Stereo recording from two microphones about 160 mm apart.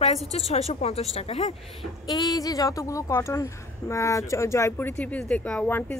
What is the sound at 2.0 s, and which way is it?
A woman's voice, 25° left (ahead or behind).